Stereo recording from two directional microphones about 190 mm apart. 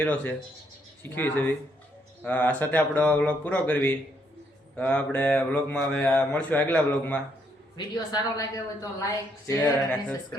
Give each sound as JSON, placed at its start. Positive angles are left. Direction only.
{"t": 0.0, "sound": "mantra", "side_deg": 5}
{"t": 7.8, "sound": "mantra", "side_deg": 20}